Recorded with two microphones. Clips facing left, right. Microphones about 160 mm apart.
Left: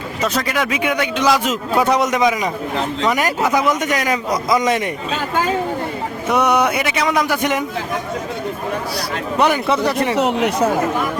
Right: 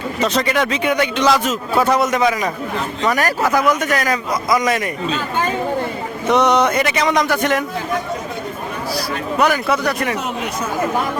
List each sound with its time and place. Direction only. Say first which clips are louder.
0.2 s a man's voice: right 2 dB; centre (ahead or behind); by 4.9 s 20° left (ahead or behind)
6.2 s a man's voice: right 2 dB; 10° left (ahead or behind)
9.4 s a man's voice: left 1 dB; 25° left (ahead or behind)
10.2 s speech: left 7 dB; 70° left (ahead or behind)